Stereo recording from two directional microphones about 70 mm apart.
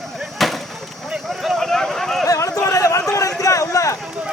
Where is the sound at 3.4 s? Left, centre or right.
Left.